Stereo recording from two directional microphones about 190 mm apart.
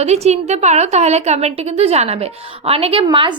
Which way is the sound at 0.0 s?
35° right (ahead or behind).